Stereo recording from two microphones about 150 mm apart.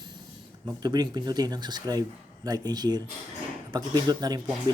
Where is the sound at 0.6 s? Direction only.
25° right (ahead or behind).